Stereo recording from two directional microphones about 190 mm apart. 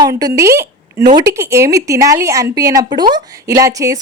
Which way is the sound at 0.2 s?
15° right (ahead or behind).